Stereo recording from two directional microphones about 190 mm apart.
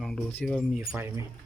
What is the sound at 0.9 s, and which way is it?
Speech, 15° right (ahead or behind).